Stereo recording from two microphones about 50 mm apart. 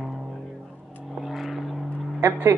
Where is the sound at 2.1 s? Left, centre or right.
Right.